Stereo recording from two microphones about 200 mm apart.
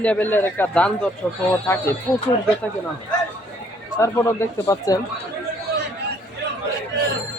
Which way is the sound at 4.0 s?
15° left (ahead or behind).